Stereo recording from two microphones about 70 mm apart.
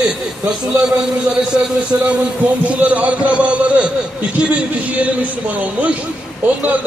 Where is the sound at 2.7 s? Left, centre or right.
Centre.